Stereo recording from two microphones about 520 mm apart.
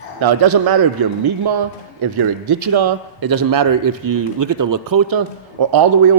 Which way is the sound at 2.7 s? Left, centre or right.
Right.